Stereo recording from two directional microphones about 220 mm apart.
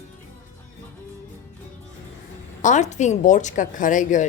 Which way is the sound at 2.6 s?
35° left (ahead or behind).